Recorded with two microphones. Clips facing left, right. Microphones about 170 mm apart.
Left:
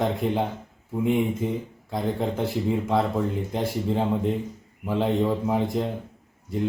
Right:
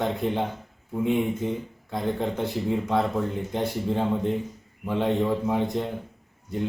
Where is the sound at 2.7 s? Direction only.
5° left (ahead or behind).